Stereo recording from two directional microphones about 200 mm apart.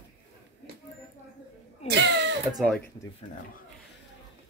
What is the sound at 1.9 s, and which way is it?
Cough, 55° right (ahead or behind).